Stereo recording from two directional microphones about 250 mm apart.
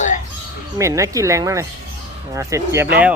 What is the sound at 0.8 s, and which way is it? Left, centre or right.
Speech, centre.